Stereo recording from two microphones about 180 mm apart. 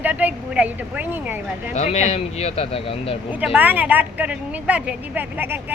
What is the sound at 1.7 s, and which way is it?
Speech, 35° left (ahead or behind).